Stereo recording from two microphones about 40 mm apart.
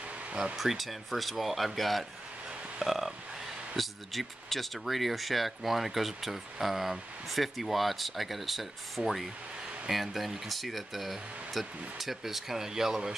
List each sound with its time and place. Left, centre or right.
0.3 s speech: right
0.6 s speech: centre